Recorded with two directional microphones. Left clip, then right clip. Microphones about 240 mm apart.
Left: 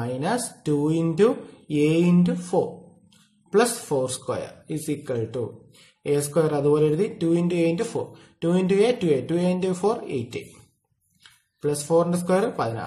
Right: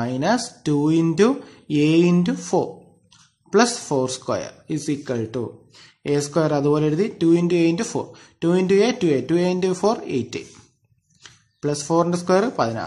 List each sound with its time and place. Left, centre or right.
0.0 s speech: right
11.6 s speech: right